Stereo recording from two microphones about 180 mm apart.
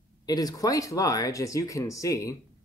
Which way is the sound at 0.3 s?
20° left (ahead or behind).